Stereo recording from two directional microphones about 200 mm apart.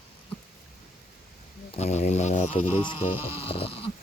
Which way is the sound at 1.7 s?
35° left (ahead or behind).